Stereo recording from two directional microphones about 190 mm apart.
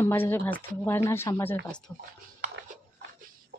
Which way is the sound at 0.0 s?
10° left (ahead or behind).